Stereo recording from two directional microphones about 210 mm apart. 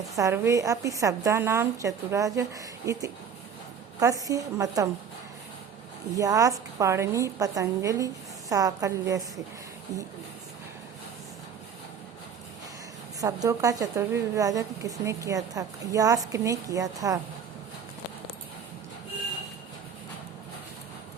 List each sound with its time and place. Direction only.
0.2 s a woman's voice: 15° right (ahead or behind)
6.1 s a woman's voice: 15° right (ahead or behind)
13.1 s a woman's voice: 15° right (ahead or behind)